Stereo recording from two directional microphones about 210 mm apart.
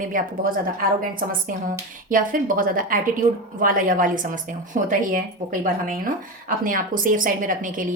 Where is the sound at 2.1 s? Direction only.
40° right (ahead or behind).